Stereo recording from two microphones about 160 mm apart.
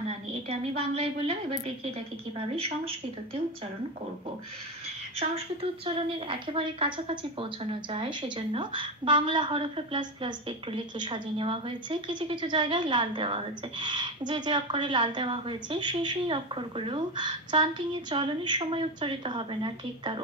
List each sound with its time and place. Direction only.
0.5 s a woman's voice: 40° right (ahead or behind)
5.9 s a woman's voice: 35° right (ahead or behind)